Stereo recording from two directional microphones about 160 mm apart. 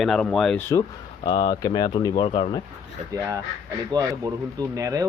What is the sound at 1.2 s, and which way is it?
Speech, 25° left (ahead or behind).